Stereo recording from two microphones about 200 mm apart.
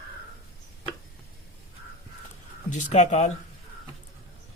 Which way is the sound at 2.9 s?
35° left (ahead or behind).